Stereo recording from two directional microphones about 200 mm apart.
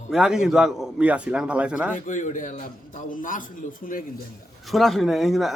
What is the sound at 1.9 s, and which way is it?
A man's voice, 40° left (ahead or behind).